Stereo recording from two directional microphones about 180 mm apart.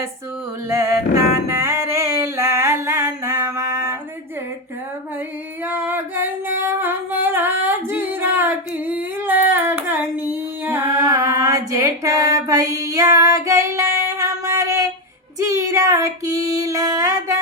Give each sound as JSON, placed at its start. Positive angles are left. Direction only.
{"t": 0.7, "sound": "music", "side_deg": -15}
{"t": 5.6, "sound": "singing", "side_deg": -10}
{"t": 15.4, "sound": "child singing", "side_deg": -15}